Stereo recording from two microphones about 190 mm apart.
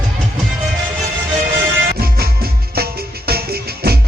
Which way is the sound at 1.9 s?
55° right (ahead or behind).